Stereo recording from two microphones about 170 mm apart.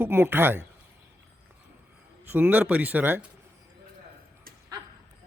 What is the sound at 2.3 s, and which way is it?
Speech, 10° right (ahead or behind).